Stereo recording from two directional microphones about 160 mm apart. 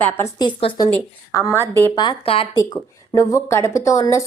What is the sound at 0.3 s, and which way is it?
Speech, 25° left (ahead or behind).